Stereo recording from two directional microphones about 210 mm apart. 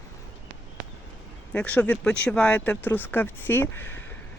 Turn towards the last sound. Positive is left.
turn(degrees=10)  # may be behind; listen again after turning